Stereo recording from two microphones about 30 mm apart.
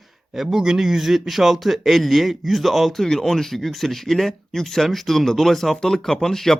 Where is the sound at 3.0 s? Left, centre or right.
Centre.